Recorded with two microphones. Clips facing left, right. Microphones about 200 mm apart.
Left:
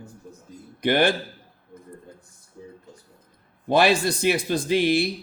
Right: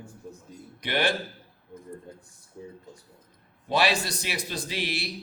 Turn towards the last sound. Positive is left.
turn(degrees=50)  # may be behind; listen again after turning